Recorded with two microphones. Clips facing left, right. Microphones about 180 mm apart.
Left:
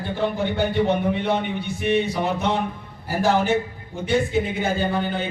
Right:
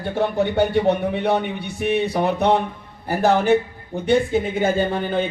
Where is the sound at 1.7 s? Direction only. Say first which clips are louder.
Right 2 dB; 65° right (ahead or behind).